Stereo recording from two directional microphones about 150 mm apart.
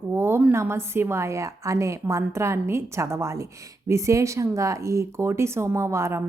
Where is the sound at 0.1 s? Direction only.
15° right (ahead or behind).